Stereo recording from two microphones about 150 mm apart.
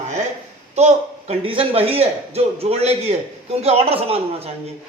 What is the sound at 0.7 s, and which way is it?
A man's voice, 45° right (ahead or behind).